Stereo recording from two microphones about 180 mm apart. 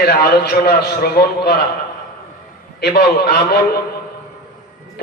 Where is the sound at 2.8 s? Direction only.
65° left (ahead or behind).